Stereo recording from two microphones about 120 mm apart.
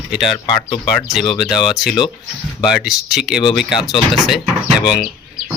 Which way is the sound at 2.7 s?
5° right (ahead or behind).